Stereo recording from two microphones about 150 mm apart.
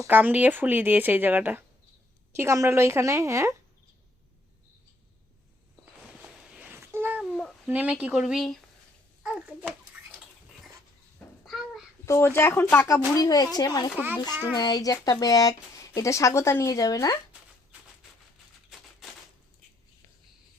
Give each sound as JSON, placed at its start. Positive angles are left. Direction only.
{"t": 0.0, "sound": "a woman's voice", "side_deg": -10}
{"t": 6.5, "sound": "a sound", "side_deg": -10}
{"t": 7.7, "sound": "speech", "side_deg": -10}
{"t": 11.2, "sound": "a sound", "side_deg": 10}
{"t": 12.0, "sound": "speech", "side_deg": 15}
{"t": 13.9, "sound": "a woman's voice", "side_deg": -10}
{"t": 14.5, "sound": "speech", "side_deg": 25}